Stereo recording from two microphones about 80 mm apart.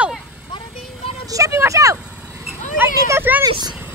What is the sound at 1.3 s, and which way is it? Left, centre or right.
Vehicle, right.